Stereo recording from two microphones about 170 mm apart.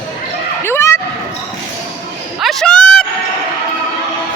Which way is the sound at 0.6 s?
15° left (ahead or behind).